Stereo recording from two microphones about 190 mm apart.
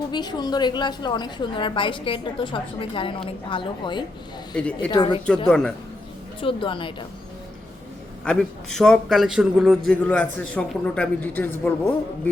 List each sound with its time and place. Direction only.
0.1 s a woman's voice: 20° left (ahead or behind)
4.5 s a man's voice: 5° left (ahead or behind)
4.9 s a woman's voice: 25° left (ahead or behind)
5.5 s a man's voice: 5° left (ahead or behind)
6.4 s a woman's voice: 25° left (ahead or behind)
8.2 s a man's voice: 5° left (ahead or behind)